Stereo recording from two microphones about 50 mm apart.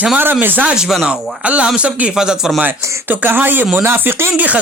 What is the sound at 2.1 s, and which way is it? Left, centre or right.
Speech, centre.